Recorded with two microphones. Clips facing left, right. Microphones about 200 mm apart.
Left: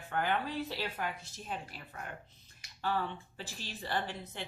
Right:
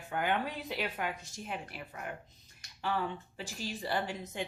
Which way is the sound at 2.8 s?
15° right (ahead or behind).